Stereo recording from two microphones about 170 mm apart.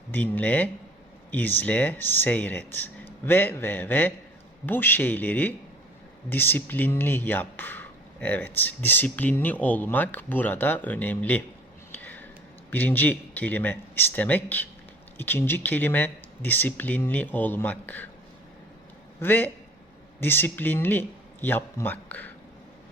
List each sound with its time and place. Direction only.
0.1 s speech: 10° left (ahead or behind)
11.9 s a sound: 10° left (ahead or behind)
12.7 s speech: 10° left (ahead or behind)
19.2 s a man's voice: 10° left (ahead or behind)